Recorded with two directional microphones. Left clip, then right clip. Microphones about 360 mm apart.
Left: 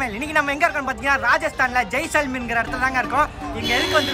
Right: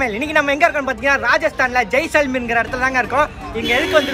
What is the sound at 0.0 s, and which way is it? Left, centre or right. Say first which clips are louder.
Speech: right 4 dB; centre.